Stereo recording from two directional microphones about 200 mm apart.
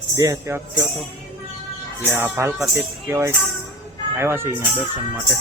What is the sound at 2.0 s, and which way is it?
Speech, 10° right (ahead or behind).